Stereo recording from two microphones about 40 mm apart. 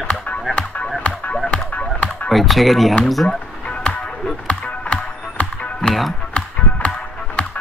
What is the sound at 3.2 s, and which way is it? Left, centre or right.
Music, left.